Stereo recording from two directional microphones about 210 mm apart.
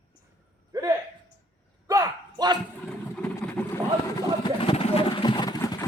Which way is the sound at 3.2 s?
5° left (ahead or behind).